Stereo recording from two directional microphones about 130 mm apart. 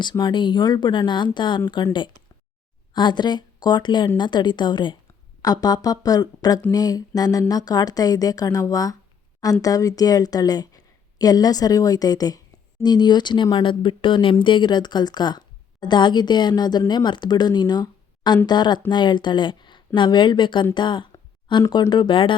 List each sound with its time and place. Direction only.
0.0 s a woman's voice: 35° left (ahead or behind)
20.7 s a sound: 35° left (ahead or behind)
21.7 s speech: 35° left (ahead or behind)